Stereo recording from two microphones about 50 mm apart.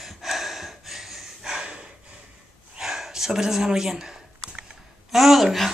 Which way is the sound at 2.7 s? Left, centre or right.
Centre.